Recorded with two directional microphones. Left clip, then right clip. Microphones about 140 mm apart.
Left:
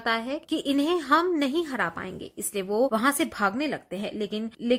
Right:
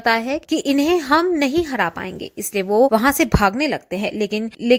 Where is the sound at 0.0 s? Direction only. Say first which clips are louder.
Right 9 dB; 40° right (ahead or behind).